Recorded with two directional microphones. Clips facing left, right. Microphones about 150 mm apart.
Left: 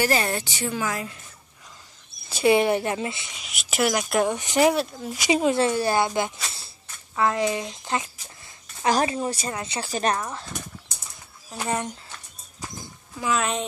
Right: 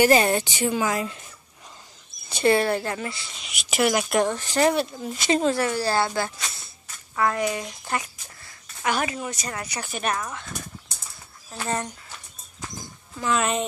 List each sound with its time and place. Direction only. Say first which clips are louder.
0.0 s a woman's voice: right 5 dB; 20° right (ahead or behind)
2.2 s a sound: even; 5° left (ahead or behind)
2.5 s speech: left 2 dB; 15° left (ahead or behind)
3.3 s speech: right 2 dB; centre (ahead or behind)
4.3 s speech: left 1 dB; 15° left (ahead or behind)
5.6 s speech: left 2 dB; 20° left (ahead or behind)
8.8 s a woman's voice: left 4 dB; 30° left (ahead or behind)
11.5 s speech: left 1 dB; 15° left (ahead or behind)
13.2 s speech: right 1 dB; centre (ahead or behind)